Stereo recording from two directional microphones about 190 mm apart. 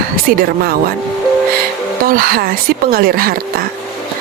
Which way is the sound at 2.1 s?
50° right (ahead or behind).